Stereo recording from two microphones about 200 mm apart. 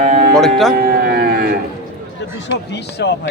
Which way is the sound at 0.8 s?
50° right (ahead or behind).